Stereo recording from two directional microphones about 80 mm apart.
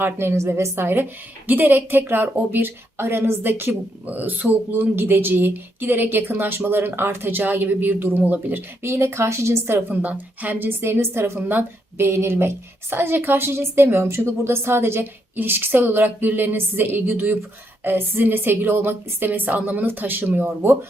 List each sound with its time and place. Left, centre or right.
0.0 s a woman's voice: right
9.9 s a woman's voice: right